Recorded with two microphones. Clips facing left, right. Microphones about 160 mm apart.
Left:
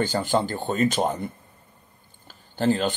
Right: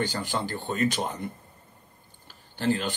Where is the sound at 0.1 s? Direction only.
35° left (ahead or behind).